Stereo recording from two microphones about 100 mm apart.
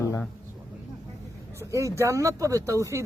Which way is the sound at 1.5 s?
30° right (ahead or behind).